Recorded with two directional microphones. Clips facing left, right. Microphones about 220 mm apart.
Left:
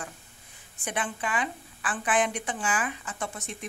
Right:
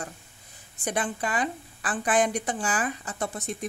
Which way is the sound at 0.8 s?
40° right (ahead or behind).